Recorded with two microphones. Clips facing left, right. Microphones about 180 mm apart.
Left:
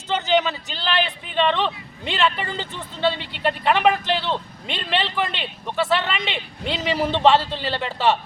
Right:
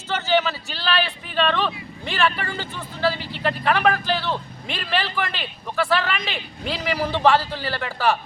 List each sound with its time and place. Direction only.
0.1 s speech: 15° left (ahead or behind)